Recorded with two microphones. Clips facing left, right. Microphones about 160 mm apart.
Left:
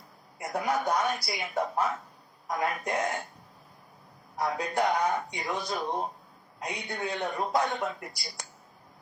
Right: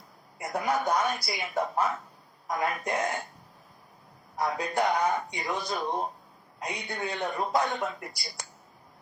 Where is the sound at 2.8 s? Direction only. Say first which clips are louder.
Even; centre (ahead or behind).